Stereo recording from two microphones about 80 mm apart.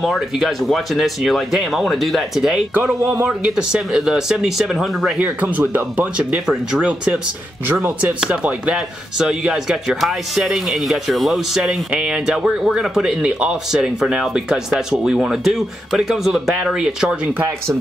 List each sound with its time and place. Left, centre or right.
0.0 s speech: centre
2.7 s speech: right
3.0 s speech: right
3.3 s speech: centre
5.2 s speech: centre
6.4 s speech: centre
6.8 s speech: centre
7.6 s speech: right
8.1 s speech: centre